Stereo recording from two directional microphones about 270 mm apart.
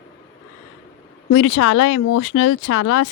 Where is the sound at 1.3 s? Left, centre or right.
Left.